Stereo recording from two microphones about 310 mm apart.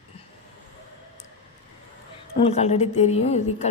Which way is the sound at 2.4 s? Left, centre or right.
Centre.